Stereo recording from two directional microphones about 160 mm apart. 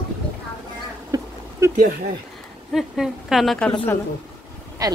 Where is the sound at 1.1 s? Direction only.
15° right (ahead or behind).